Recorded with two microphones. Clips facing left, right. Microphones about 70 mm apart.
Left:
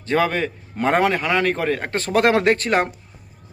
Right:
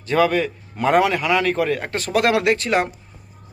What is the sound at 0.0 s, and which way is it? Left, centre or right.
A man's voice, left.